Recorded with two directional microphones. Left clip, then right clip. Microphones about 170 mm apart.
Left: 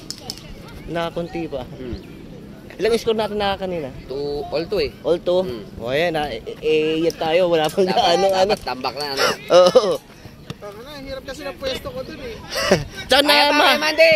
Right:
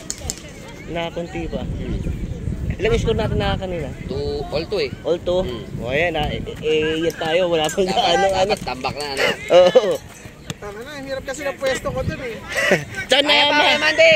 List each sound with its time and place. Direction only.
0.9 s speech: 30° left (ahead or behind)
2.8 s speech: 35° left (ahead or behind)
4.1 s speech: 50° left (ahead or behind)
5.0 s speech: 30° left (ahead or behind)
8.4 s speech: 45° left (ahead or behind)
9.1 s speech: 20° left (ahead or behind)
11.1 s speech: 40° right (ahead or behind)
12.4 s speech: 20° left (ahead or behind)
13.3 s speech: 55° left (ahead or behind)
13.7 s speech: 70° left (ahead or behind)